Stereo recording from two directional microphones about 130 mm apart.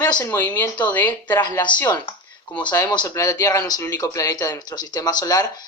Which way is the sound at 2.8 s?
30° left (ahead or behind).